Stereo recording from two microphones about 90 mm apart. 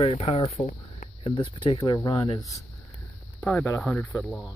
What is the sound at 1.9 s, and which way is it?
Speech, 55° left (ahead or behind).